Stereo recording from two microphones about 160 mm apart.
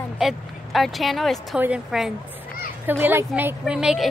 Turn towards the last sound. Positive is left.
turn(degrees=-5)  # may be behind; listen again after turning